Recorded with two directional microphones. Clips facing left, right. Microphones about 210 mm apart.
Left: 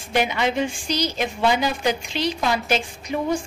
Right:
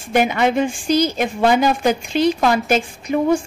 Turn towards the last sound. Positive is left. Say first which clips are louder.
# right 7 dB
turn(degrees=-50)  # may be behind; listen again after turning